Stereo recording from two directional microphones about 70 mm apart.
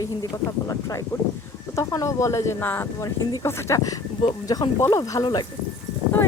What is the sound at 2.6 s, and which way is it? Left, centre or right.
Speech, left.